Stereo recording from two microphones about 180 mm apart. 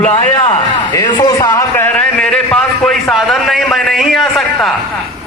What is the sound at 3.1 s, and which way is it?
A man's voice, centre (ahead or behind).